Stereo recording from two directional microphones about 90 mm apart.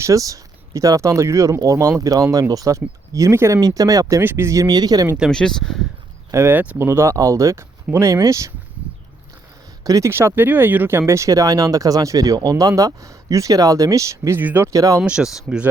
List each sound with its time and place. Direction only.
0.0 s speech: 40° right (ahead or behind)
4.2 s speech: 25° right (ahead or behind)
4.6 s speech: 45° right (ahead or behind)
5.3 s speech: 5° left (ahead or behind)
6.3 s speech: 25° right (ahead or behind)
9.8 s speech: 40° right (ahead or behind)
10.1 s speech: 25° right (ahead or behind)
14.7 s speech: 40° right (ahead or behind)
15.0 s speech: 10° right (ahead or behind)